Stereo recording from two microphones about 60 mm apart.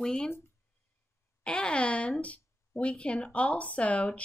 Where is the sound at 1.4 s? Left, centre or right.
Centre.